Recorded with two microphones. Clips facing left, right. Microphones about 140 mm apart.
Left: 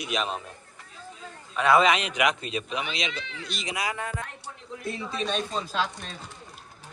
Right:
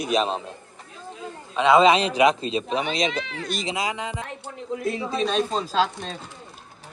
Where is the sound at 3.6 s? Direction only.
25° right (ahead or behind).